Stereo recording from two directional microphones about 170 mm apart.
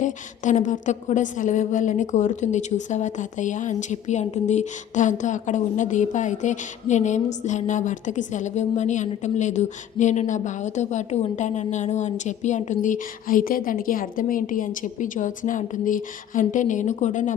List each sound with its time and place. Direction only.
0.0 s a woman's voice: 45° left (ahead or behind)